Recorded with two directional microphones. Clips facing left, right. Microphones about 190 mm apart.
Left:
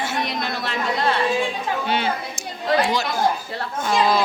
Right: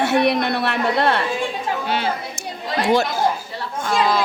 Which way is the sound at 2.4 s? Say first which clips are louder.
Left 4 dB; 55° right (ahead or behind).